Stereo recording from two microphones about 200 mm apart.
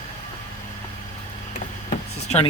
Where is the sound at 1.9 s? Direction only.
35° left (ahead or behind).